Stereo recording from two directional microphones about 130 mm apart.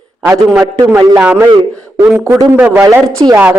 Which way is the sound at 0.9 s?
25° right (ahead or behind).